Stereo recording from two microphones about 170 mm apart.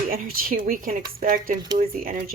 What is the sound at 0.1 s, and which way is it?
A woman's voice, 55° right (ahead or behind).